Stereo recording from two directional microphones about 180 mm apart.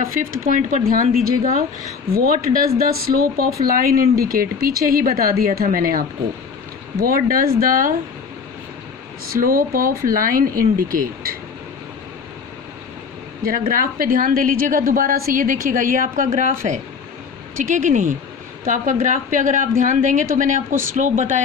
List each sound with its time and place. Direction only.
0.0 s a woman's voice: 50° right (ahead or behind)
9.3 s a woman's voice: 55° right (ahead or behind)
13.4 s a woman's voice: 50° right (ahead or behind)